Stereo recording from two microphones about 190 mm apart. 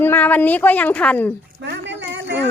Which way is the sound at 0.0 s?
10° left (ahead or behind).